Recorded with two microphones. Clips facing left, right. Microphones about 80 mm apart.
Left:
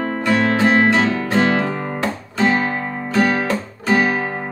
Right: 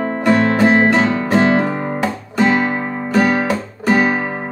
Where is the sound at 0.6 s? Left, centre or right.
Right.